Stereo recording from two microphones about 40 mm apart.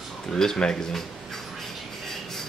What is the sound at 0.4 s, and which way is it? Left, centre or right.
Speech, centre.